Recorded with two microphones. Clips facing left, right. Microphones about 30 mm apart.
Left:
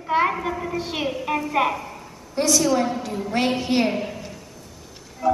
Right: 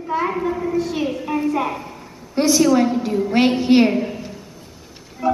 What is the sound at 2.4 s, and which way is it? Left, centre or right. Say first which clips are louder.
A woman's voice: right 5 dB; centre.